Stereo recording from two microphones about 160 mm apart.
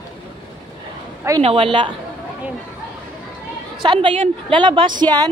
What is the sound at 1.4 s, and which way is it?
Speech, 35° right (ahead or behind).